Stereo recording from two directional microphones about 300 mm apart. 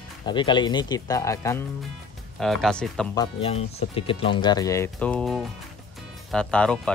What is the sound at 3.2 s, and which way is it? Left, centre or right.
Speech, centre.